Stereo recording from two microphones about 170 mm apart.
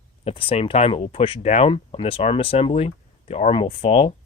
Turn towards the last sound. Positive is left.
turn(degrees=35)  # may be behind; listen again after turning